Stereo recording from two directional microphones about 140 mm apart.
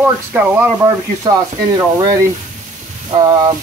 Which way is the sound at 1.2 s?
25° right (ahead or behind).